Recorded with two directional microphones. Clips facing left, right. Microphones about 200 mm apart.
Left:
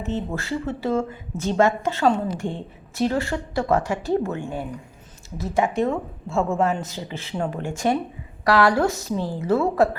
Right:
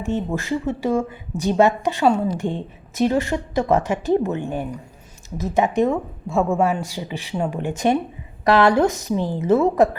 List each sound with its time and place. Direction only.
0.0 s a woman's voice: 15° right (ahead or behind)